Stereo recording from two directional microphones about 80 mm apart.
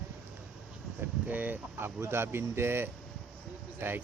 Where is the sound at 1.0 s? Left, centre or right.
Right.